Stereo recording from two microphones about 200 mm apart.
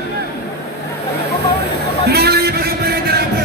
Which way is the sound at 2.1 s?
55° right (ahead or behind).